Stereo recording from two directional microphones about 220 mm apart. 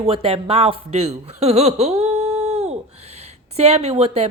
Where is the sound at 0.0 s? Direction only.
25° right (ahead or behind).